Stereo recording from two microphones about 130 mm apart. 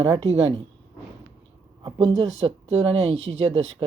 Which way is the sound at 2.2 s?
55° right (ahead or behind).